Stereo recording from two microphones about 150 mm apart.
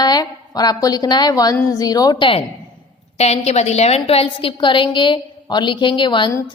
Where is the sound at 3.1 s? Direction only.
45° left (ahead or behind).